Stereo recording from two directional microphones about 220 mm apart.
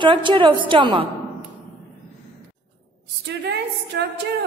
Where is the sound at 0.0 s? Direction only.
20° right (ahead or behind).